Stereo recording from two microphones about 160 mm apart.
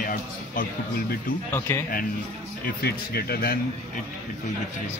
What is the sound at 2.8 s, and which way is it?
Speech, 75° left (ahead or behind).